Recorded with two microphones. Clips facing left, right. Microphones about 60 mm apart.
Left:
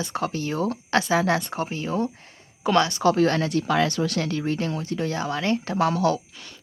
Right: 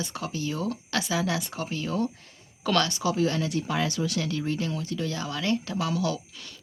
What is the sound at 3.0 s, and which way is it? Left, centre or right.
Speech, left.